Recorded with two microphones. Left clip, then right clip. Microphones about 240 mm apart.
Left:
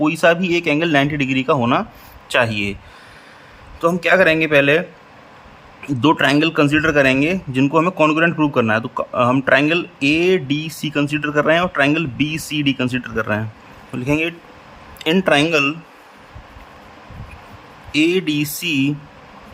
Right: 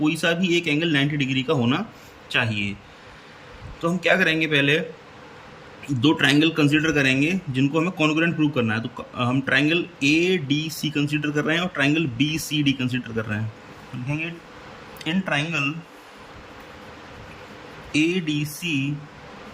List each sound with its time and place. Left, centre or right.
0.0 s speech: centre
3.8 s speech: centre
14.9 s speech: left
17.9 s speech: left